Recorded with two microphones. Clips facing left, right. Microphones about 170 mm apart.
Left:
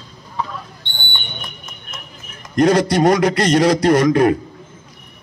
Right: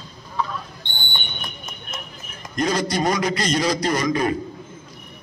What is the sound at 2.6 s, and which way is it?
A man's voice, 70° left (ahead or behind).